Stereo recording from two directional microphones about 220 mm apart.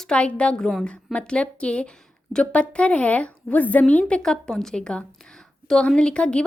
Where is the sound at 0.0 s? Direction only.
5° left (ahead or behind).